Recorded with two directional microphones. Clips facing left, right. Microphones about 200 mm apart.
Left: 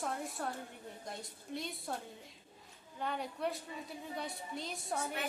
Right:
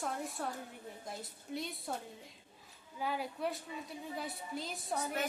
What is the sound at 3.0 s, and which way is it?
A woman's voice, 5° right (ahead or behind).